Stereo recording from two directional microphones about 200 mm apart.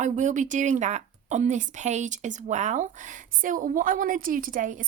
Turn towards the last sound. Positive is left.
turn(degrees=-40)  # may be behind; listen again after turning